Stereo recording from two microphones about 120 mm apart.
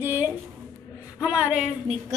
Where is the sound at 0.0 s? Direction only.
15° right (ahead or behind).